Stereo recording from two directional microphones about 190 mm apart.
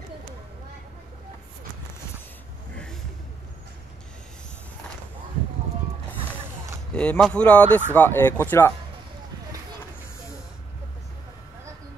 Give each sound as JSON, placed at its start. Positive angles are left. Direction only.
{"t": 2.7, "sound": "vehicle", "side_deg": 5}
{"t": 7.0, "sound": "speech", "side_deg": 5}